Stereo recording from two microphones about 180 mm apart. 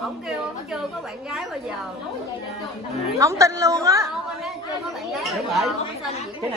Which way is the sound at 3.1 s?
15° right (ahead or behind).